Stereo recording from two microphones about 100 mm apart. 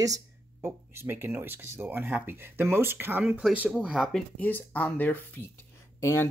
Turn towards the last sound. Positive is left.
turn(degrees=25)  # may be behind; listen again after turning